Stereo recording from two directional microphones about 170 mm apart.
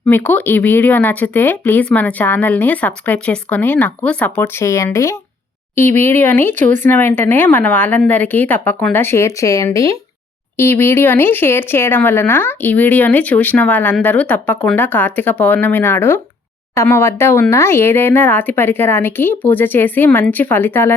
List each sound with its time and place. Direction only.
0.1 s speech: 10° left (ahead or behind)